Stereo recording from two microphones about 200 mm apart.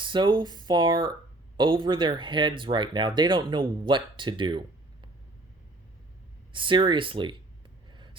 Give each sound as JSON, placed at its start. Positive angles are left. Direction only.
{"t": 0.0, "sound": "speech", "side_deg": -25}
{"t": 6.5, "sound": "speech", "side_deg": -25}
{"t": 7.9, "sound": "vehicle", "side_deg": -25}